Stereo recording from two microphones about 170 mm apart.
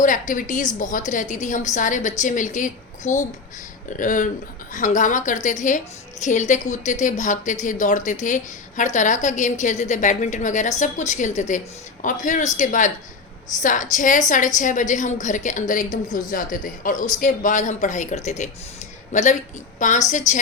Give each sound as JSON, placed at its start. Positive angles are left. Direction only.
{"t": 0.0, "sound": "a woman's voice", "side_deg": 50}